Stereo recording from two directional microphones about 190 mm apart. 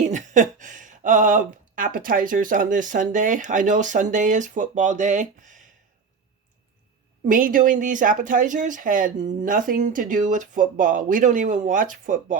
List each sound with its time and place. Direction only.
0.0 s speech: 40° right (ahead or behind)
7.3 s speech: 45° right (ahead or behind)